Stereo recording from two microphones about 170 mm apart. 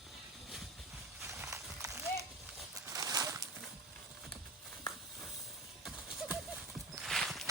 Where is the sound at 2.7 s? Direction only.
20° right (ahead or behind).